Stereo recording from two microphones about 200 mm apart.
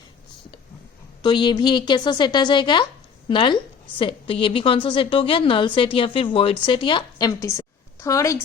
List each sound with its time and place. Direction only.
1.2 s a woman's voice: 20° left (ahead or behind)